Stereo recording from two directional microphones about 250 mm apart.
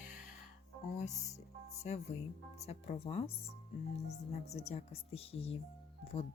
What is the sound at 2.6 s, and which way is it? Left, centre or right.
Speech, left.